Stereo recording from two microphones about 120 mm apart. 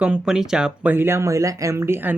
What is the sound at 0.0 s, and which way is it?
Speech, 5° right (ahead or behind).